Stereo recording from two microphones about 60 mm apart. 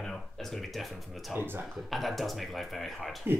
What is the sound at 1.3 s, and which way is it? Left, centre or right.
Speech, right.